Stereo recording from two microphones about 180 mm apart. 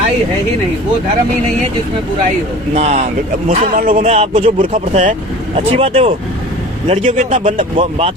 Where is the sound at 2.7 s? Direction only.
35° right (ahead or behind).